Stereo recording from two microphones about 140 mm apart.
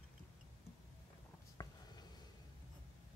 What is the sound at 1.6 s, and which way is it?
Writing, 25° left (ahead or behind).